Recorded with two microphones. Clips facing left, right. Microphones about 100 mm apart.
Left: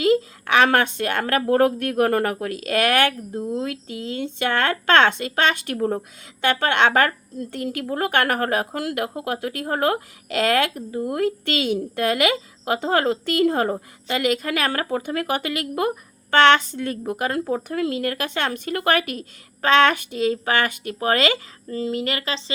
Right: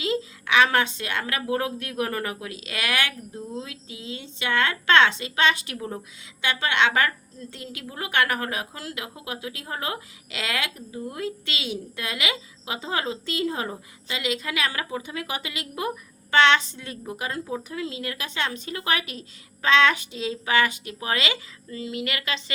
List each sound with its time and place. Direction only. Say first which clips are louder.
0.0 s a woman's voice: left 8 dB; 50° left (ahead or behind); by 22.5 s 30° left (ahead or behind)